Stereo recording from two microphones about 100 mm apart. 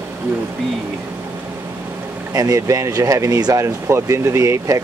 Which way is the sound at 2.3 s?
35° right (ahead or behind).